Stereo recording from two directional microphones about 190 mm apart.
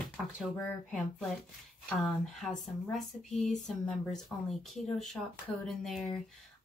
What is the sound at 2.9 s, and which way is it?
Speech, centre (ahead or behind).